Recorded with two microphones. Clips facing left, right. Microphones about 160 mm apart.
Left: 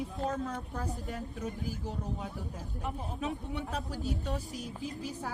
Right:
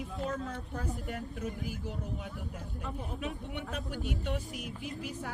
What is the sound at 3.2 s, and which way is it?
Speech, 35° left (ahead or behind).